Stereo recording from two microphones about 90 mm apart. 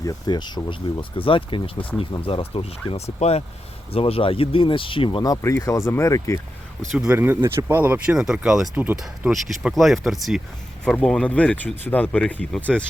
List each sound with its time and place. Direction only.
0.0 s speech: 45° left (ahead or behind); by 1.7 s 75° left (ahead or behind)
2.2 s speech: 90° left; by 5.2 s 70° left (ahead or behind)
5.4 s speech: 35° left (ahead or behind)
7.1 s speech: 20° right (ahead or behind); by 8.7 s 5° right (ahead or behind)
8.7 s speech: 20° right (ahead or behind)
9.0 s speech: centre (ahead or behind)
11.0 s speech: 10° left (ahead or behind)